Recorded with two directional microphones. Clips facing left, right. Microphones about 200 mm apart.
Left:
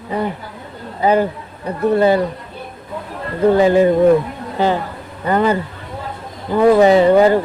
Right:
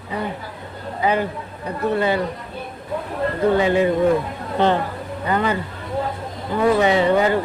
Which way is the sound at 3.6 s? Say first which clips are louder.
Left 8 dB; 35° left (ahead or behind).